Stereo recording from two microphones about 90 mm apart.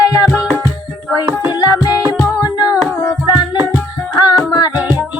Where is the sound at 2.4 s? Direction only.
45° left (ahead or behind).